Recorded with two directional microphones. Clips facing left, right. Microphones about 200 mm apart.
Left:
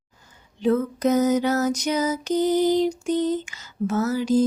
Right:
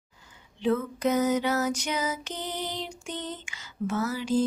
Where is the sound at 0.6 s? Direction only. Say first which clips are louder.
Left 5 dB; 40° left (ahead or behind).